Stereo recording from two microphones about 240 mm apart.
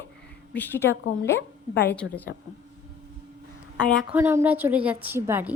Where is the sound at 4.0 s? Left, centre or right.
Centre.